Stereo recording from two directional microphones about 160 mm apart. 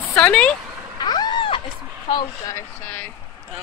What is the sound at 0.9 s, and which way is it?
Vehicle, 25° left (ahead or behind).